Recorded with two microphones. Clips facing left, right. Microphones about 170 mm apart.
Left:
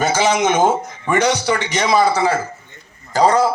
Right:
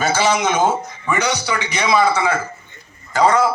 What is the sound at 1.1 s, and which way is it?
A man's voice, 50° left (ahead or behind).